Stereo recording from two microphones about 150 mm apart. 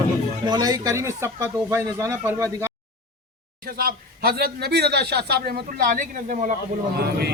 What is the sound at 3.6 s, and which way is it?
A man's voice, 85° right.